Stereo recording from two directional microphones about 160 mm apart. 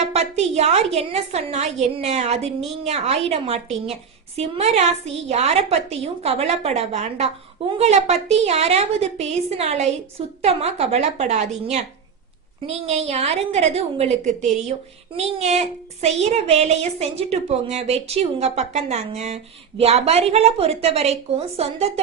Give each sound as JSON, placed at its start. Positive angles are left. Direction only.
{"t": 0.0, "sound": "a woman's voice", "side_deg": -40}